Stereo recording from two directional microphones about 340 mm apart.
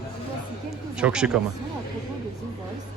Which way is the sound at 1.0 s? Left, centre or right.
Centre.